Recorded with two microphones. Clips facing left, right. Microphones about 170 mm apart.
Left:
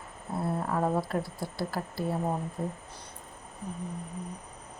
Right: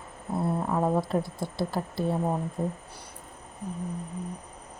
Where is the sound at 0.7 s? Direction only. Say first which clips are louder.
Right 3 dB; 15° right (ahead or behind).